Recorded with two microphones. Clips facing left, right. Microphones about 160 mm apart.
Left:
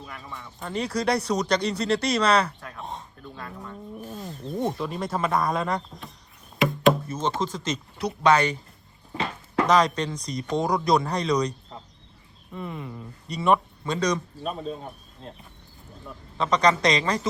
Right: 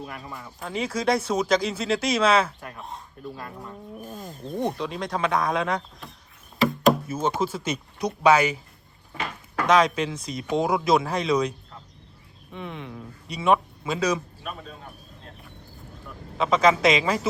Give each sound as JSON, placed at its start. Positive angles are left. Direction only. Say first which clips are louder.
{"t": 0.0, "sound": "speech", "louder": "right 3 dB", "side_deg": -5}
{"t": 4.0, "sound": "wild animals", "louder": "left 1 dB", "side_deg": -45}
{"t": 4.4, "sound": "speech", "louder": "even", "side_deg": 0}
{"t": 9.6, "sound": "speech", "louder": "right 2 dB", "side_deg": 0}
{"t": 12.5, "sound": "speech", "louder": "left 1 dB", "side_deg": 0}
{"t": 14.4, "sound": "speech", "louder": "left 7 dB", "side_deg": 30}
{"t": 16.4, "sound": "speech", "louder": "right 2 dB", "side_deg": -5}